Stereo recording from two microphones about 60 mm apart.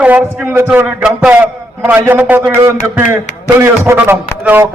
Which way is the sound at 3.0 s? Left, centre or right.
Right.